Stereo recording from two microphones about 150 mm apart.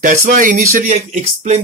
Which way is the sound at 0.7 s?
50° right (ahead or behind).